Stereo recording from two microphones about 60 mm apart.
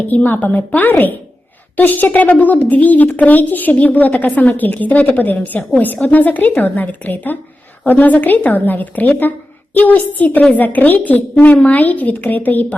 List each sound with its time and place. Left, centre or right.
0.1 s a woman's voice: left